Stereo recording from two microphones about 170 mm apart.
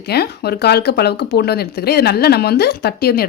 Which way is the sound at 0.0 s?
70° left (ahead or behind).